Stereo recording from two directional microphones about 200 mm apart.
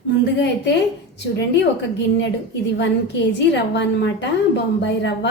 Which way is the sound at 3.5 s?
60° left (ahead or behind).